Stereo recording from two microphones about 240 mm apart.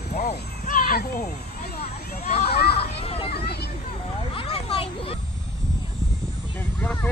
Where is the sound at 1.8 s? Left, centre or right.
Left.